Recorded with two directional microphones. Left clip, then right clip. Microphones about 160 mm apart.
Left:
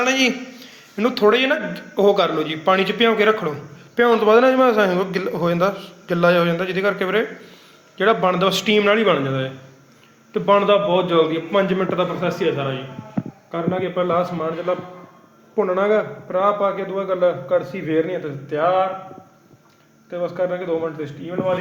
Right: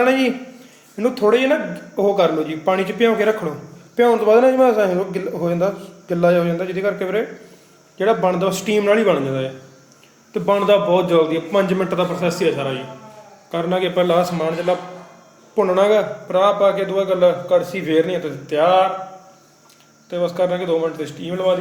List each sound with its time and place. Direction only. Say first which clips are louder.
0.0 s a man's voice: right 2 dB; centre (ahead or behind)
13.5 s a man's voice: right 4 dB; 15° right (ahead or behind)
20.1 s a man's voice: right 3 dB; 10° right (ahead or behind)